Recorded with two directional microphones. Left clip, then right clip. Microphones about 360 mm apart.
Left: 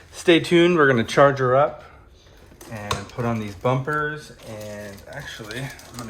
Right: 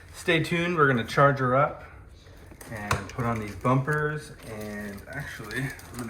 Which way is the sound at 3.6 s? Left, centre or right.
Left.